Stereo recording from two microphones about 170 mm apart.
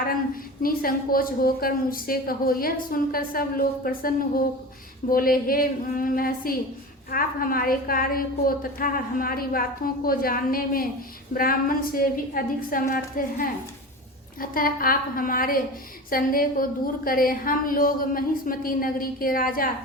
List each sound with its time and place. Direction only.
0.6 s a woman's voice: 60° left (ahead or behind)